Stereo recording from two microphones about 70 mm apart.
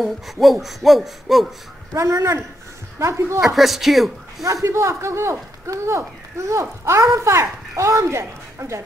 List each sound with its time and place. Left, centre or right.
0.0 s hoot: centre
2.0 s speech: right
3.3 s hoot: centre
4.4 s speech: right